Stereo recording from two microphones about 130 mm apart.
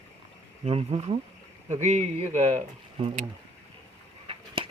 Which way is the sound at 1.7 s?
65° right (ahead or behind).